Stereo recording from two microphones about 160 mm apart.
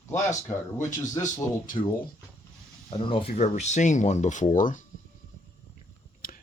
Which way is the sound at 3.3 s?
45° left (ahead or behind).